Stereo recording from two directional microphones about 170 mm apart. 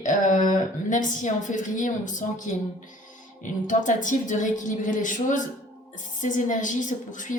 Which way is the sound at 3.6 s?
50° left (ahead or behind).